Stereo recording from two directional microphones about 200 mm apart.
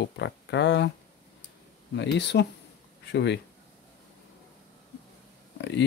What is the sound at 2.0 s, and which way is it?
Speech, 60° left (ahead or behind).